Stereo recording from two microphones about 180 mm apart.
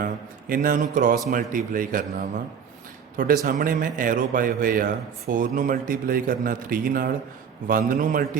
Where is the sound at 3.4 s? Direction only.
50° right (ahead or behind).